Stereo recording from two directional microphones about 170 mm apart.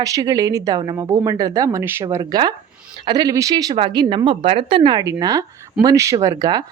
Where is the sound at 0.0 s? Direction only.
20° right (ahead or behind).